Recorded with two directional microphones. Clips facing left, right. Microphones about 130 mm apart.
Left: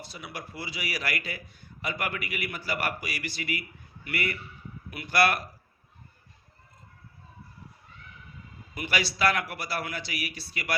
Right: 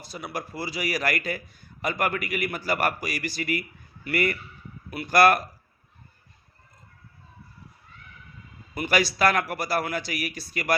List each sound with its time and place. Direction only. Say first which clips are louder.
0.0 s a man's voice: right 6 dB; 45° right (ahead or behind)
8.7 s a man's voice: right 6 dB; 40° right (ahead or behind)